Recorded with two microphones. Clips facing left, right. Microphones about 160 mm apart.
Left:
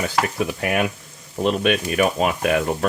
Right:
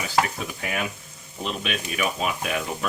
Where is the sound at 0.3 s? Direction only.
65° left (ahead or behind).